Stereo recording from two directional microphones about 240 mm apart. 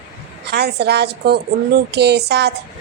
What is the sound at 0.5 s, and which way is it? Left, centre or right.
A child's voice, right.